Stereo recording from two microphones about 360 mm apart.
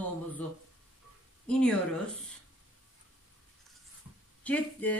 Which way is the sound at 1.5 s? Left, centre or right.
Centre.